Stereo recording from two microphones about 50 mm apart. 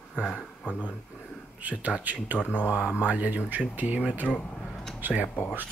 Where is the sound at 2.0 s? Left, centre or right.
Right.